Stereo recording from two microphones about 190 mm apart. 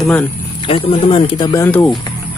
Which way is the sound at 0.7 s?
30° left (ahead or behind).